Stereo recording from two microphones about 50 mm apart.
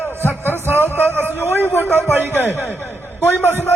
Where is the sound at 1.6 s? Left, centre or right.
Left.